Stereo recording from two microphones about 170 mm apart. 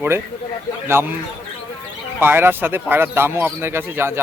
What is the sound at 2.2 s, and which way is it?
A man's voice, 10° right (ahead or behind).